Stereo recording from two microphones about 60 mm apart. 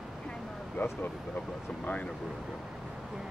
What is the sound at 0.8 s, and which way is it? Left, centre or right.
Speech, left.